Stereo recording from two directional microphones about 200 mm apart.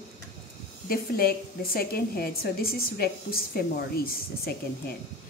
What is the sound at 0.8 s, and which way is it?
A woman's voice, 50° left (ahead or behind).